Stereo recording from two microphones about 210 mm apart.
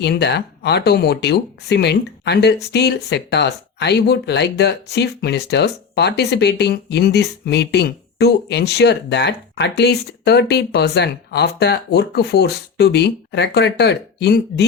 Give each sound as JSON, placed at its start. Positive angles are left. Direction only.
{"t": 0.0, "sound": "speech", "side_deg": 50}